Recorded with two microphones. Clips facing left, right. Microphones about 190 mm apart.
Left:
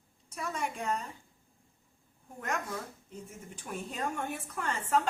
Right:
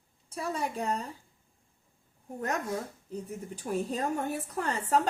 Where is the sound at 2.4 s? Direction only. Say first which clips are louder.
Right 4 dB; 35° right (ahead or behind).